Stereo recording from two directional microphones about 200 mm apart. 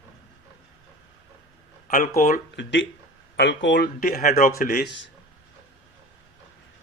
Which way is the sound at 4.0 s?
45° left (ahead or behind).